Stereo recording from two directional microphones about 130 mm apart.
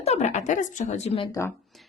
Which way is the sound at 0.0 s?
60° left (ahead or behind).